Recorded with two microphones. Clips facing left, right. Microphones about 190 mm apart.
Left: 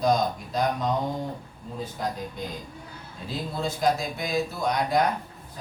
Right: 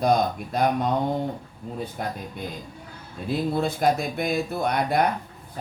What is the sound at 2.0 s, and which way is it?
Speech, 65° right (ahead or behind).